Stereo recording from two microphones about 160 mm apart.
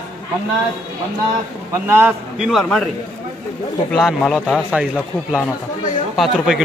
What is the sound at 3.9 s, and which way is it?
Speech, centre (ahead or behind).